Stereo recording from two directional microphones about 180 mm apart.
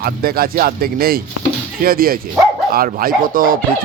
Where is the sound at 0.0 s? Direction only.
55° right (ahead or behind).